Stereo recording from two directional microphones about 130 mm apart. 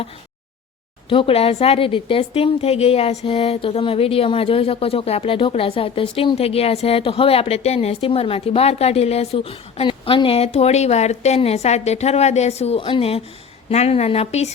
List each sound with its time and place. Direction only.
1.1 s a woman's voice: 45° left (ahead or behind)